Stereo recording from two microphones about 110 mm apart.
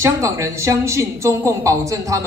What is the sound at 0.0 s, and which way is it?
A woman's voice, 25° right (ahead or behind).